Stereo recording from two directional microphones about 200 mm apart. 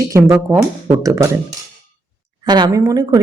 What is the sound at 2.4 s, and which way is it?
Speech, 20° right (ahead or behind).